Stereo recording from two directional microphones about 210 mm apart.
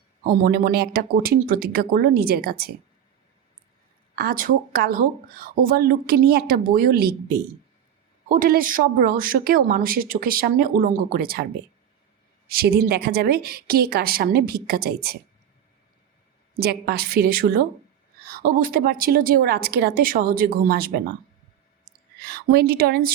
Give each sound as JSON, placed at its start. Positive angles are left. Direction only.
{"t": 0.3, "sound": "speech", "side_deg": -45}
{"t": 4.1, "sound": "speech", "side_deg": -45}
{"t": 12.5, "sound": "speech", "side_deg": -45}
{"t": 16.6, "sound": "speech", "side_deg": -50}
{"t": 22.3, "sound": "speech", "side_deg": -50}